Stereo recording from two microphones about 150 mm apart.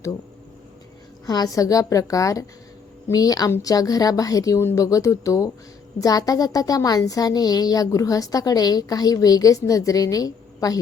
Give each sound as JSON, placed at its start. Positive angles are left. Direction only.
{"t": 1.3, "sound": "a woman's voice", "side_deg": 25}